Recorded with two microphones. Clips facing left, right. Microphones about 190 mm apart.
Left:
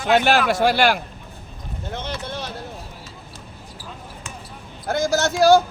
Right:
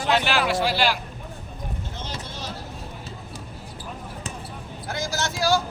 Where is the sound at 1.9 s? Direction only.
60° left (ahead or behind).